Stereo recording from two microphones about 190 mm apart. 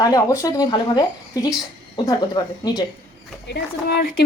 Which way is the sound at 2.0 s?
20° left (ahead or behind).